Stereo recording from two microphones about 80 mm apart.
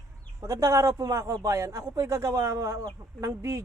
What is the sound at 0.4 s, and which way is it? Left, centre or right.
A man's voice, right.